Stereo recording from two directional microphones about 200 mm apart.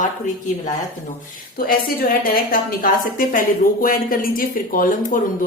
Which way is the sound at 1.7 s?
45° left (ahead or behind).